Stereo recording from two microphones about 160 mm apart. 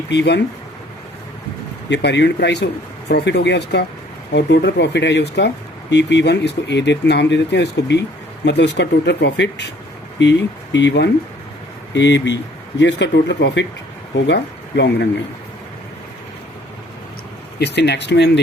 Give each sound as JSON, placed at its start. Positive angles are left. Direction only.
{"t": 0.1, "sound": "speech", "side_deg": 90}
{"t": 1.9, "sound": "speech", "side_deg": 90}
{"t": 10.8, "sound": "speech", "side_deg": 90}
{"t": 17.6, "sound": "speech", "side_deg": 90}